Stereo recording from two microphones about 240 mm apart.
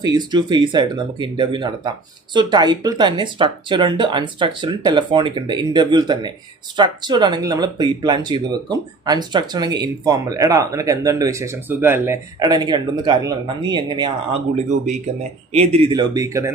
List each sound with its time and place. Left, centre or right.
0.0 s speech: centre
15.5 s speech: right